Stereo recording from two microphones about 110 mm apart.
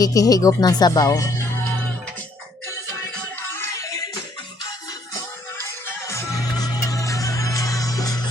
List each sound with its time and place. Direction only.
0.0 s speech: 30° left (ahead or behind)
3.3 s music: 20° left (ahead or behind)
5.5 s music: 20° left (ahead or behind)